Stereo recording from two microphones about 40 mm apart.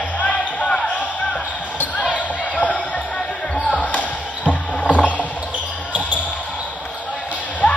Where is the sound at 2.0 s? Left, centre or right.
Left.